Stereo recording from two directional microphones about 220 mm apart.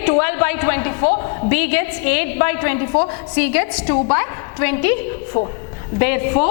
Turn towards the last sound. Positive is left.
turn(degrees=10)  # may be behind; listen again after turning